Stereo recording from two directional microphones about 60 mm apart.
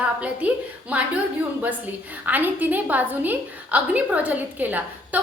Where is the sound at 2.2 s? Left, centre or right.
Right.